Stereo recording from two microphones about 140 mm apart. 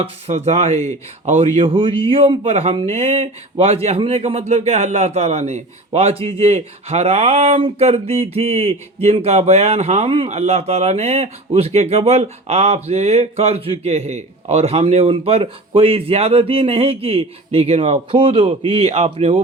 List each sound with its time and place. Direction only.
0.0 s speech: 50° right (ahead or behind)
1.6 s speech: 40° right (ahead or behind)